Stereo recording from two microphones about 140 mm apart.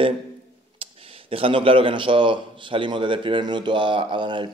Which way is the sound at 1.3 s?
40° right (ahead or behind).